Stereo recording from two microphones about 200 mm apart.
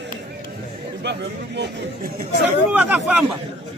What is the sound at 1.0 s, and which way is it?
Chatter, 60° right (ahead or behind).